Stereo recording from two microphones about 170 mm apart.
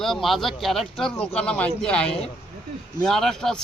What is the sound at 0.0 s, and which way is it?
Speech, centre (ahead or behind).